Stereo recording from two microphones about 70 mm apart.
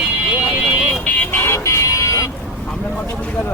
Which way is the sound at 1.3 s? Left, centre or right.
Left.